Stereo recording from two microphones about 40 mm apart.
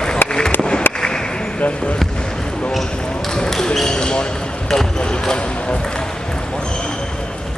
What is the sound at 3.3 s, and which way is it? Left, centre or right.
Basketball bounce, centre.